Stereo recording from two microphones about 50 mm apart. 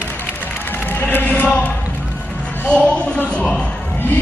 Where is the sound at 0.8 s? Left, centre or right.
Left.